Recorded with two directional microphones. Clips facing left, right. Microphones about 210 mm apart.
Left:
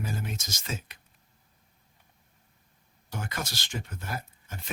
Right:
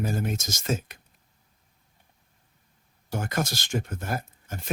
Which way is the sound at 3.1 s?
45° right (ahead or behind).